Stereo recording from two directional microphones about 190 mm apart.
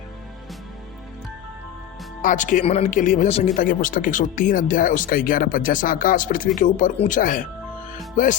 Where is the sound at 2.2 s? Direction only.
40° left (ahead or behind).